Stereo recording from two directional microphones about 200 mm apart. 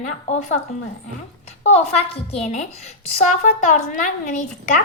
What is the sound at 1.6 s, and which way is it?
Speech, 35° left (ahead or behind).